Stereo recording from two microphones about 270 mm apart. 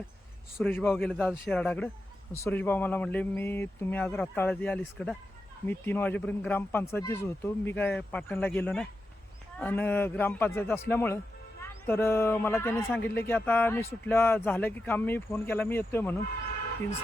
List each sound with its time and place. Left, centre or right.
0.5 s a man's voice: centre